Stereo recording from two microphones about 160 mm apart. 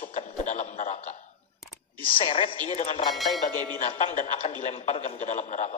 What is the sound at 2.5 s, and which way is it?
A man's voice, 45° left (ahead or behind).